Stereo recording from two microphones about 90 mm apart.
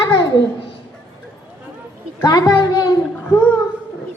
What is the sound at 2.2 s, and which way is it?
Speech, 50° left (ahead or behind).